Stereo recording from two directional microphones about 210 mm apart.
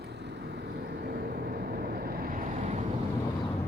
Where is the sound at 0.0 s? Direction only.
55° right (ahead or behind); by 2.8 s 35° right (ahead or behind).